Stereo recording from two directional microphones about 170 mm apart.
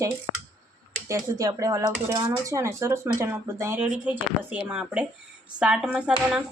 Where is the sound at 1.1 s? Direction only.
20° right (ahead or behind).